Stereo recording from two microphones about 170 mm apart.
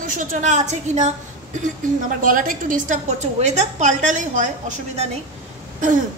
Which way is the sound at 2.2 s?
55° right (ahead or behind).